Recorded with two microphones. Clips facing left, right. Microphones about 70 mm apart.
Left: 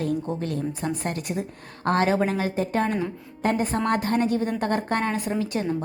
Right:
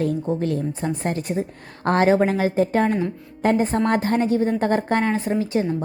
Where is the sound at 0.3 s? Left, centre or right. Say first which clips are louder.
Right 4 dB; right.